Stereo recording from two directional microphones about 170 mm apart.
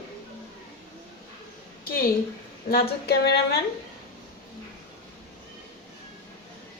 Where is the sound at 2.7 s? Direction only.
70° left (ahead or behind).